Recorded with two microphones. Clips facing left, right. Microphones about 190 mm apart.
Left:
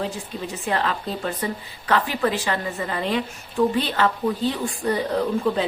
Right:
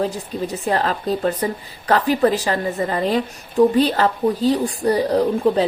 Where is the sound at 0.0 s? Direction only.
40° right (ahead or behind).